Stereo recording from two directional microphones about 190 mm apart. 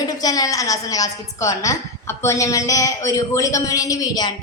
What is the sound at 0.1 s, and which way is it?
A woman's voice, 20° left (ahead or behind).